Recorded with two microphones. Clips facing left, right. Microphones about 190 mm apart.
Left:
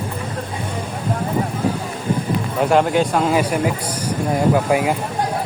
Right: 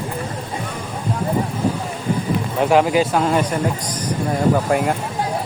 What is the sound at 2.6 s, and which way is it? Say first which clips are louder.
Speech: even; centre (ahead or behind).